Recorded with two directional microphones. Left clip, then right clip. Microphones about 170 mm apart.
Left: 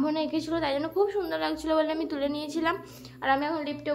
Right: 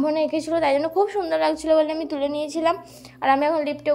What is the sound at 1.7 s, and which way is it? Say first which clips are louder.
A woman's voice: right 5 dB; 25° right (ahead or behind).